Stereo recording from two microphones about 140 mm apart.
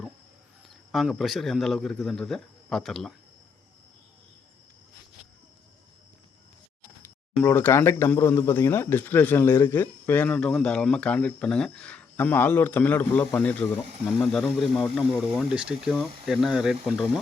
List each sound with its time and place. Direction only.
0.7 s speech: centre (ahead or behind)
7.4 s speech: 15° left (ahead or behind); by 16.7 s 5° right (ahead or behind)